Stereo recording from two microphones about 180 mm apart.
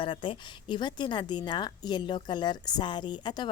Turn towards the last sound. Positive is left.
turn(degrees=25)  # may be behind; listen again after turning